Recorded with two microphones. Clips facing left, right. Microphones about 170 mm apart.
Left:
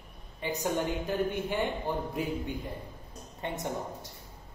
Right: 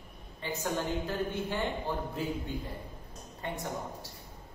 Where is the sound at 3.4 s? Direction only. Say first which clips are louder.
Left 2 dB; 20° left (ahead or behind).